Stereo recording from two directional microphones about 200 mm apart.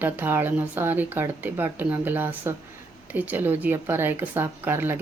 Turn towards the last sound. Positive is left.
turn(degrees=-10)  # may be behind; listen again after turning